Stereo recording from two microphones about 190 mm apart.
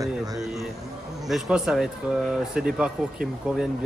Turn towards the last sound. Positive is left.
turn(degrees=-5)  # may be behind; listen again after turning